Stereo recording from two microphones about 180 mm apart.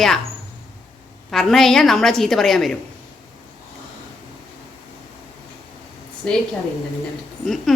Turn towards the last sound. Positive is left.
turn(degrees=0)  # may be behind; listen again after turning